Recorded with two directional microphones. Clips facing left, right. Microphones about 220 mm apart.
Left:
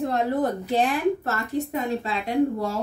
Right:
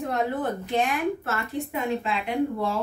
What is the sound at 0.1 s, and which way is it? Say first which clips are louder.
A woman's voice: left 3 dB; 35° left (ahead or behind).